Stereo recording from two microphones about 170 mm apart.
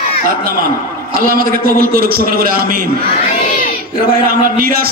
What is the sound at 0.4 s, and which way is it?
A man's voice, 60° right (ahead or behind).